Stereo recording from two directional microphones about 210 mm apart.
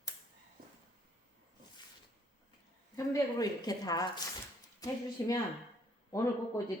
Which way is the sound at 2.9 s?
15° left (ahead or behind).